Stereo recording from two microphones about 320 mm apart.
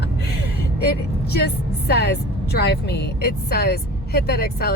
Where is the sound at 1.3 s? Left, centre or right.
Left.